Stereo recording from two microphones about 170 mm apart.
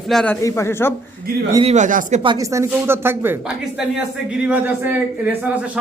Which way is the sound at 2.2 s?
30° right (ahead or behind).